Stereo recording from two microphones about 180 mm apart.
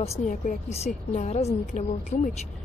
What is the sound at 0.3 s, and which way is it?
A woman's voice, 40° left (ahead or behind).